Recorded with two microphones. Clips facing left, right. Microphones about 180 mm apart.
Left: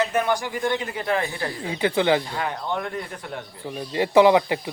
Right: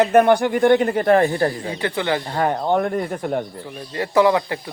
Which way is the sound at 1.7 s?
15° left (ahead or behind).